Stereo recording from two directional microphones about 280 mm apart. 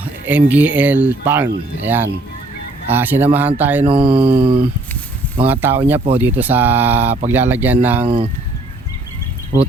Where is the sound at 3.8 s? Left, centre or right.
Centre.